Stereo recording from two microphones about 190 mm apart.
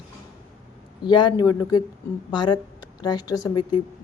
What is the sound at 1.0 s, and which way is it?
Speech, 25° left (ahead or behind).